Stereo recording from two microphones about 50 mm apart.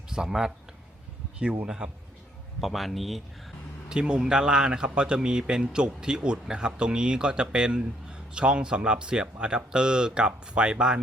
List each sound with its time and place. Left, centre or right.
0.1 s speech: centre
1.6 s a man's voice: centre
2.6 s speech: centre
3.8 s a man's voice: centre